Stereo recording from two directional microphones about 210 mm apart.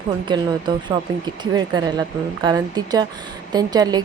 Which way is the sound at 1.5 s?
20° right (ahead or behind).